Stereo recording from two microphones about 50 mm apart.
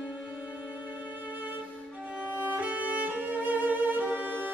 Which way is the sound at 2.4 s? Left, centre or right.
Right.